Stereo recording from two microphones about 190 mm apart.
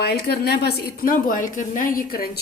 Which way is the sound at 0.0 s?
55° left (ahead or behind).